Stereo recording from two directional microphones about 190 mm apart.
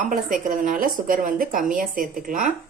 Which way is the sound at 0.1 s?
45° right (ahead or behind).